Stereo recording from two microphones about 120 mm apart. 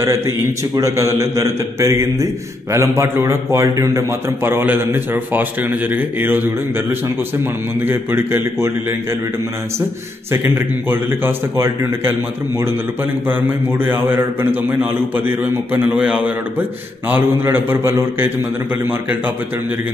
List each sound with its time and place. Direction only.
0.7 s a man's voice: 25° right (ahead or behind)
7.8 s a man's voice: 20° right (ahead or behind)
10.9 s a man's voice: 20° right (ahead or behind)